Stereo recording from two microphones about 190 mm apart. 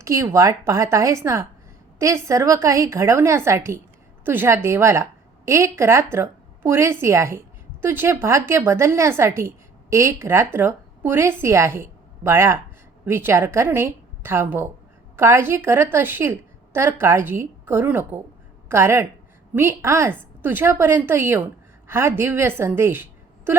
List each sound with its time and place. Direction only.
0.0 s a woman's voice: 15° right (ahead or behind)